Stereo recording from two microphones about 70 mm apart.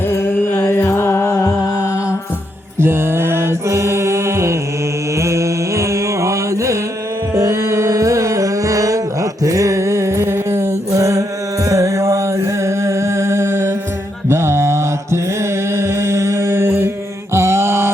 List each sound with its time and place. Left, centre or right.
0.1 s music: left
2.8 s mantra: right
5.1 s music: right
9.4 s a sound: right
14.3 s mantra: right